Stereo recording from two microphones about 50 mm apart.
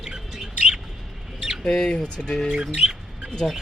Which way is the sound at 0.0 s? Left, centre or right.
Centre.